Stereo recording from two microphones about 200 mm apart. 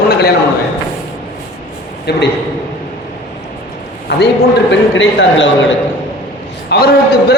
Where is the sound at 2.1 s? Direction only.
55° left (ahead or behind).